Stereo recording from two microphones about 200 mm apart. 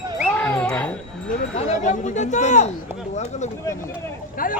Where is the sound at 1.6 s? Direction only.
35° left (ahead or behind).